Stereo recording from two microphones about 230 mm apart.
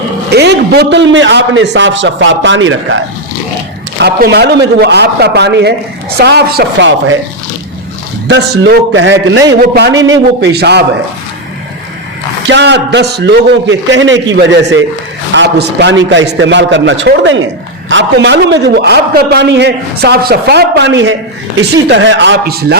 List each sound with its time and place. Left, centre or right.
0.3 s a man's voice: right
3.9 s a man's voice: right
8.3 s a man's voice: right
12.5 s a man's voice: right